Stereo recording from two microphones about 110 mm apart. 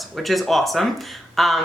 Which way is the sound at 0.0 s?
Centre (ahead or behind).